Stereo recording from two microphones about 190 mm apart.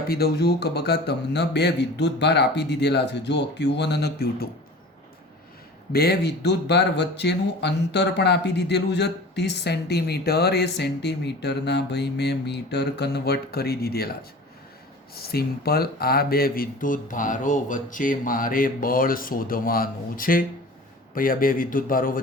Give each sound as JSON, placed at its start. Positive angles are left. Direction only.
{"t": 0.1, "sound": "speech", "side_deg": 55}
{"t": 5.9, "sound": "speech", "side_deg": 55}